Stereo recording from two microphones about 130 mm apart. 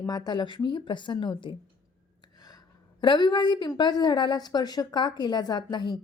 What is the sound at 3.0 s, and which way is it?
Speech, 35° left (ahead or behind).